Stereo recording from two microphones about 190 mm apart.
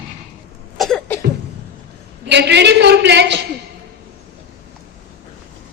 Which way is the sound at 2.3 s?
65° right (ahead or behind).